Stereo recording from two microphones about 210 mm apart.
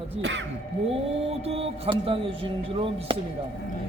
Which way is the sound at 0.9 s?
30° right (ahead or behind).